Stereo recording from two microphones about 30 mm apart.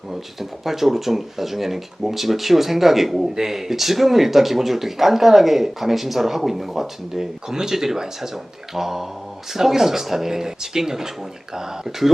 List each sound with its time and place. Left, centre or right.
0.1 s speech: centre